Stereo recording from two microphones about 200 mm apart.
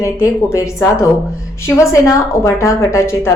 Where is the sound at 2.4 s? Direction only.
15° left (ahead or behind).